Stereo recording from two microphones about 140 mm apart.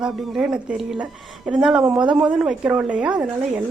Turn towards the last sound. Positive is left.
turn(degrees=-5)  # may be behind; listen again after turning